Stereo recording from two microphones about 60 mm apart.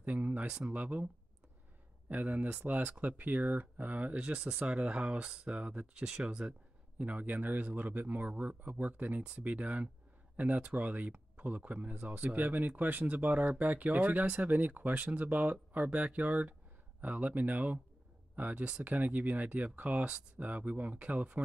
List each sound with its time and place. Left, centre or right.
0.0 s speech: right
2.0 s speech: right
7.0 s speech: right
14.5 s speech: right